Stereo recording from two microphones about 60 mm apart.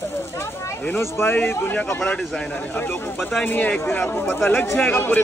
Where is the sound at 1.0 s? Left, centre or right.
Left.